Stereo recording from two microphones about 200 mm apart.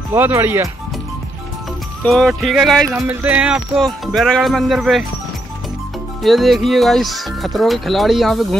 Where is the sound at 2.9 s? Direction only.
10° right (ahead or behind).